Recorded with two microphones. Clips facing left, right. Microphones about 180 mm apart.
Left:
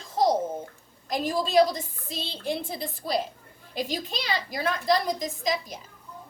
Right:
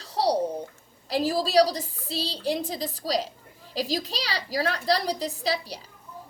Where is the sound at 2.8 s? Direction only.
90° right.